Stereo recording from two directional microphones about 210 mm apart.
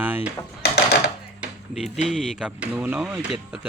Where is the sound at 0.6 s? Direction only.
50° left (ahead or behind).